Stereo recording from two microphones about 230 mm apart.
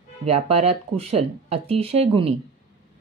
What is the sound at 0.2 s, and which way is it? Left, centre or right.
Speech, right.